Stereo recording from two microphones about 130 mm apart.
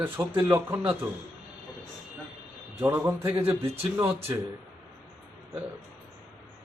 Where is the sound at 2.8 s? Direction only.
15° right (ahead or behind).